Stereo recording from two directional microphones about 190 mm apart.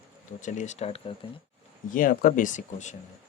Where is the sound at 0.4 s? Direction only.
40° left (ahead or behind).